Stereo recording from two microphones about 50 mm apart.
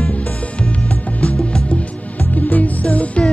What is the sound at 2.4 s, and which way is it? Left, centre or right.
Music, left.